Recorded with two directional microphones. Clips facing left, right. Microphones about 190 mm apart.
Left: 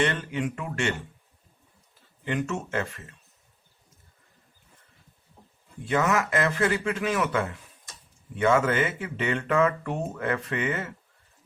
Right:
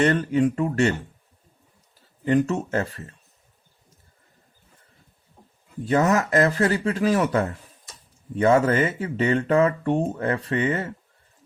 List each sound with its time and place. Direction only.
0.0 s speech: 40° right (ahead or behind)
2.2 s speech: 40° right (ahead or behind)
5.8 s speech: 40° right (ahead or behind)